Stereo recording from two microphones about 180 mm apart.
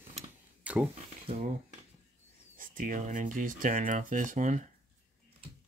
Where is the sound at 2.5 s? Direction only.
50° right (ahead or behind).